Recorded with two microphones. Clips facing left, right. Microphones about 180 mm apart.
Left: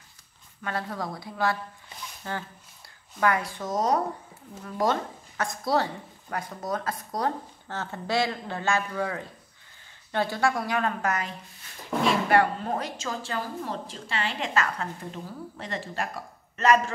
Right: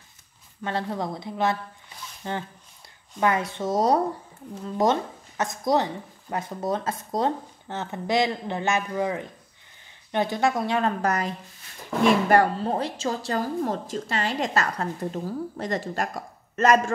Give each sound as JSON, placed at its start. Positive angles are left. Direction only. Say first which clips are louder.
{"t": 0.6, "sound": "a woman's voice", "louder": "right 4 dB", "side_deg": -25}